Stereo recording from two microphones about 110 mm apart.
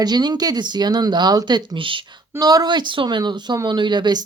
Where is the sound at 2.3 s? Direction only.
35° right (ahead or behind).